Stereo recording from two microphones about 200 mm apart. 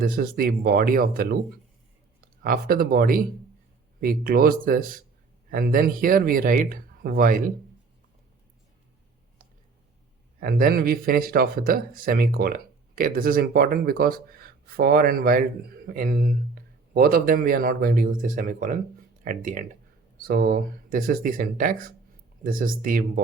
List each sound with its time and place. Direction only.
0.0 s speech: 45° right (ahead or behind)
2.4 s speech: 45° right (ahead or behind)
10.4 s speech: 50° right (ahead or behind)